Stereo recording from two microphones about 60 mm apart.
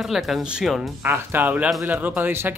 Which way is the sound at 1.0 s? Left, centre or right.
Right.